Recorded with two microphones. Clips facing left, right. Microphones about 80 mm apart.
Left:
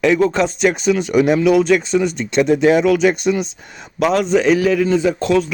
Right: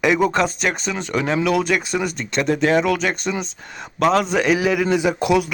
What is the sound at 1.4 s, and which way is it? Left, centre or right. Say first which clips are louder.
A man's voice: left 6 dB; centre.